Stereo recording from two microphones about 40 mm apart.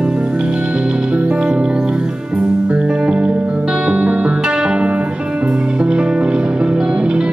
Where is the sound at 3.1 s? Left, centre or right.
Right.